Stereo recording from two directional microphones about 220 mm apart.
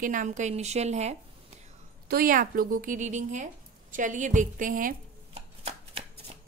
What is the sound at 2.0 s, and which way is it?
A woman's voice, 40° right (ahead or behind).